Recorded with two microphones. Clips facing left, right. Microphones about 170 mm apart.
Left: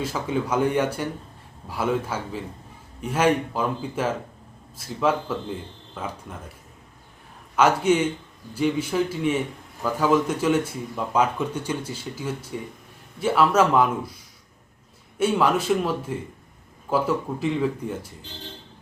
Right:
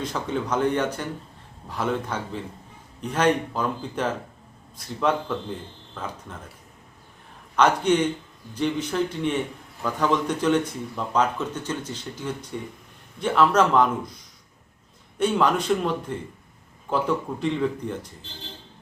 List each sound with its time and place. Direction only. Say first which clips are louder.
0.0 s a man's voice: left 2 dB; 5° left (ahead or behind)
7.5 s speech: left 1 dB; 5° left (ahead or behind)
15.2 s a man's voice: left 1 dB; 5° left (ahead or behind)